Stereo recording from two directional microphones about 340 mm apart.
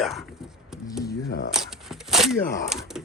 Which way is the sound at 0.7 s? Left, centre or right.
Centre.